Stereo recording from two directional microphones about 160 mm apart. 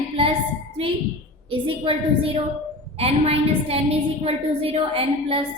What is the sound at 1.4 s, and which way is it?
A woman's voice, 35° right (ahead or behind).